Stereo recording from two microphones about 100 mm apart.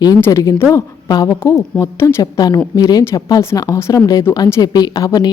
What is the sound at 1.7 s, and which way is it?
Speech, 30° left (ahead or behind).